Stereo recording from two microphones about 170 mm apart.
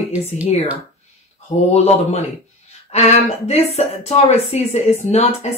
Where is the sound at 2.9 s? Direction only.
40° left (ahead or behind).